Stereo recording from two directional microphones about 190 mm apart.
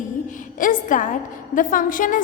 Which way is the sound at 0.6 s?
45° left (ahead or behind).